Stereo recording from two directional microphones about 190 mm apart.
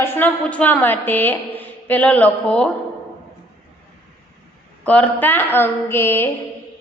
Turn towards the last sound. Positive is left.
turn(degrees=15)  # may be behind; listen again after turning